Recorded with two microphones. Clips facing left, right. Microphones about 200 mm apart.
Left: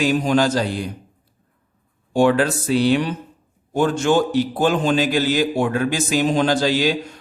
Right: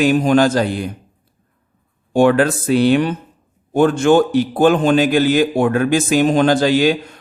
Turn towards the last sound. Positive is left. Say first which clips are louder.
# right 5 dB
turn(degrees=-55)  # may be behind; listen again after turning